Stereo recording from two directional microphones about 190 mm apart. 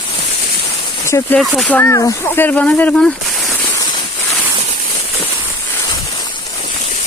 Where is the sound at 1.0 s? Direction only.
15° left (ahead or behind).